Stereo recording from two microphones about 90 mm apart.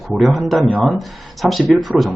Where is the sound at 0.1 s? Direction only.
Centre (ahead or behind).